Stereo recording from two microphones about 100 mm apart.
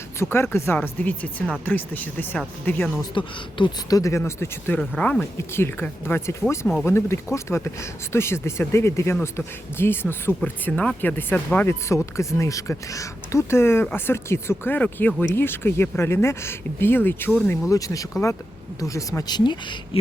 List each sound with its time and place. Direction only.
0.2 s speech: 25° left (ahead or behind)
3.2 s speech: 55° left (ahead or behind)
3.8 s speech: 35° left (ahead or behind)
4.8 s speech: 10° left (ahead or behind)
5.5 s speech: 25° left (ahead or behind)
17.6 s speech: 35° left (ahead or behind)